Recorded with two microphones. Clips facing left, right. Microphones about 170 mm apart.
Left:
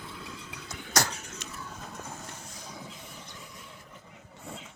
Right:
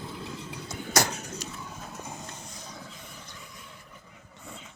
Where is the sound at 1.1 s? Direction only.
40° right (ahead or behind).